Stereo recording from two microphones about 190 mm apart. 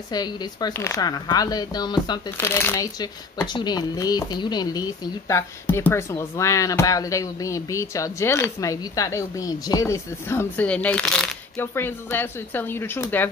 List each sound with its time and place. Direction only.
0.1 s speech: 20° left (ahead or behind)
2.3 s speech: 10° left (ahead or behind)